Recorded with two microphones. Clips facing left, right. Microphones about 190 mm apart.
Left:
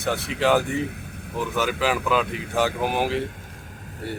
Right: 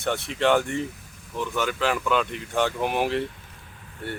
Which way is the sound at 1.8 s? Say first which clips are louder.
Left 1 dB; 5° left (ahead or behind).